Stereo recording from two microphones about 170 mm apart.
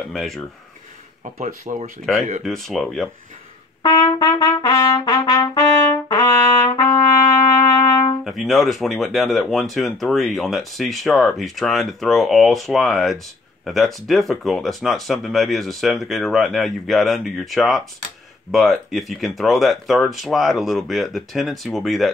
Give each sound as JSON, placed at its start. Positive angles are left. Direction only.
{"t": 0.1, "sound": "speech", "side_deg": 0}
{"t": 1.4, "sound": "speech", "side_deg": -50}
{"t": 2.4, "sound": "speech", "side_deg": 0}
{"t": 3.8, "sound": "trumpet", "side_deg": 30}
{"t": 7.5, "sound": "music", "side_deg": 20}
{"t": 8.2, "sound": "speech", "side_deg": 0}